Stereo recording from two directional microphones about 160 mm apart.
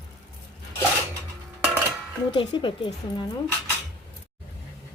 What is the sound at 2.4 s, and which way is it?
Speech, 30° left (ahead or behind).